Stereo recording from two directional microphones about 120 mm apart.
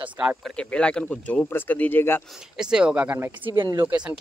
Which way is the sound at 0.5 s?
10° left (ahead or behind).